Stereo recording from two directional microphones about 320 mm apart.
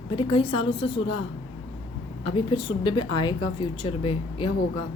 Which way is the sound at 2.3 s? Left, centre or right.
Centre.